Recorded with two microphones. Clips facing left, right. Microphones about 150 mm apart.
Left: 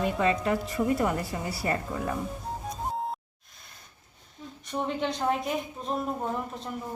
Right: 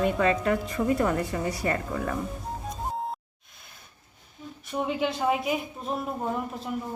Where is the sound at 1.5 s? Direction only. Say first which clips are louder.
Right 2 dB; 25° left (ahead or behind).